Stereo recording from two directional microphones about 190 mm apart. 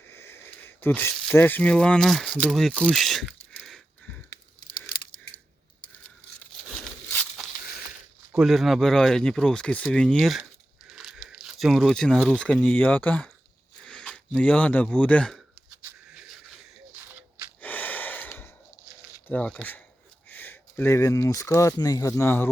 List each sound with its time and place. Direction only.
0.1 s a sound: 10° left (ahead or behind)
1.1 s speech: 5° left (ahead or behind)
8.4 s speech: centre (ahead or behind)
15.8 s a sound: 5° right (ahead or behind)
17.6 s gasp: 10° left (ahead or behind)
19.3 s speech: 5° left (ahead or behind)